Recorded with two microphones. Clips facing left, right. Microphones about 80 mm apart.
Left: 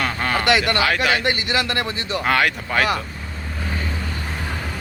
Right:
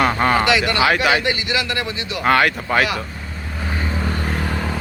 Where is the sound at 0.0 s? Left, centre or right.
Centre.